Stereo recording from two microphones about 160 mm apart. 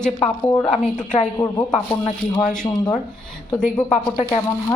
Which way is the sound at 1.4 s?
20° left (ahead or behind).